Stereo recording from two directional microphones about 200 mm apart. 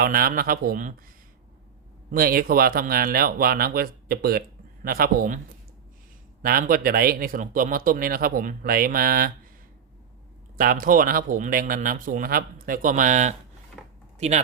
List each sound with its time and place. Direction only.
0.0 s speech: 45° right (ahead or behind)
2.0 s speech: 45° right (ahead or behind)
6.4 s speech: 45° right (ahead or behind)
10.6 s speech: 45° right (ahead or behind)
13.8 s a sound: 5° right (ahead or behind)
14.2 s speech: 35° right (ahead or behind)